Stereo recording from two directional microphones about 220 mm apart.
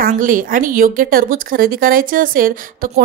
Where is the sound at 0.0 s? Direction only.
40° right (ahead or behind).